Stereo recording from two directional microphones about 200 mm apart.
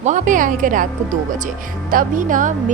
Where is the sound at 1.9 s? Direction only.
40° right (ahead or behind).